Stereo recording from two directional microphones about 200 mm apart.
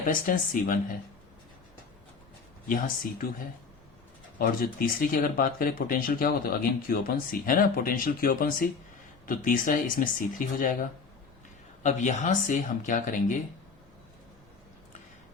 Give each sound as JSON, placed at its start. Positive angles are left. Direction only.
{"t": 0.1, "sound": "speech", "side_deg": 45}
{"t": 2.6, "sound": "speech", "side_deg": 45}
{"t": 4.4, "sound": "speech", "side_deg": 45}